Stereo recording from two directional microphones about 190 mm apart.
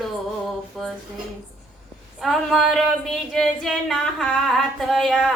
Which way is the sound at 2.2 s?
Centre (ahead or behind).